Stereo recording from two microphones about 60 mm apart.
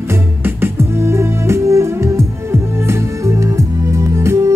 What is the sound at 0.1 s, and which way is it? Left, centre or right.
Music, right.